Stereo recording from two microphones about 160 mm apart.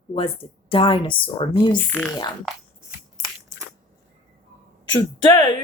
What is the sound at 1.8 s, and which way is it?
Speech, 10° left (ahead or behind).